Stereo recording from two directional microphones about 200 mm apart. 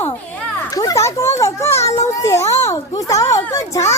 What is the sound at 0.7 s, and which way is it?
A child's voice, 20° left (ahead or behind).